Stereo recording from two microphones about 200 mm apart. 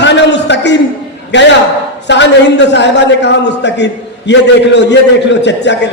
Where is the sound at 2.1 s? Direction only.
60° left (ahead or behind).